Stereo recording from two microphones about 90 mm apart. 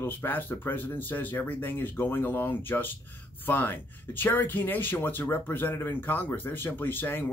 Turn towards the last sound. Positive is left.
turn(degrees=20)  # may be behind; listen again after turning